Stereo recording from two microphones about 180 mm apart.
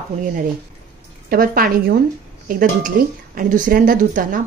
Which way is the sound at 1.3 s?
55° right (ahead or behind).